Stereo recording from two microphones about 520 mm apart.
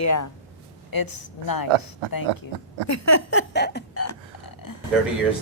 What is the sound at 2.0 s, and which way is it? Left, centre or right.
Speech, right.